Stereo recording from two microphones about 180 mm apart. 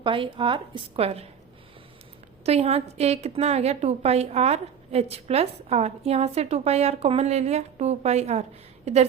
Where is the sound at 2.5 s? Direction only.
35° right (ahead or behind).